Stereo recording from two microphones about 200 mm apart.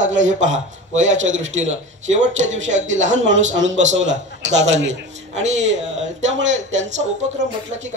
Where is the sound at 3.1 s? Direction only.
70° right (ahead or behind).